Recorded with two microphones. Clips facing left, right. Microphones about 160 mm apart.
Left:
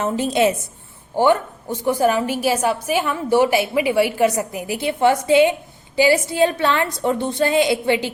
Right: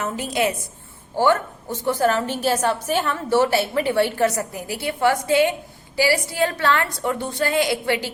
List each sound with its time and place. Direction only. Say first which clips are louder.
0.0 s a woman's voice: left 5 dB; 25° left (ahead or behind)